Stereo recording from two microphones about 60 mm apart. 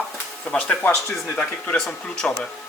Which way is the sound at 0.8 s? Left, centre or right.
Left.